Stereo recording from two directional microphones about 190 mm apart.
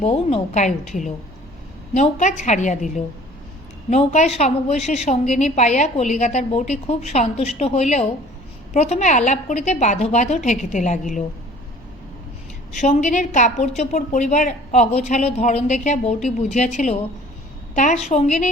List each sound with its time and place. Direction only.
0.0 s a woman's voice: 30° left (ahead or behind)
12.8 s a woman's voice: 40° left (ahead or behind)